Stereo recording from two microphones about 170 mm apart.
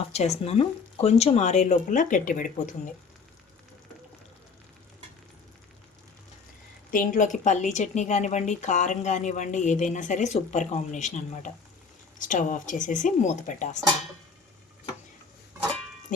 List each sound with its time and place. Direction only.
0.1 s speech: 40° left (ahead or behind)
6.9 s speech: 50° left (ahead or behind)